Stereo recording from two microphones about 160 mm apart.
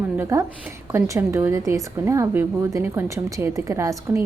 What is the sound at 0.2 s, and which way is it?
A woman's voice, 20° right (ahead or behind).